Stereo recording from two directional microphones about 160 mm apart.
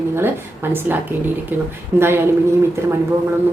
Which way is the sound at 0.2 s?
15° right (ahead or behind).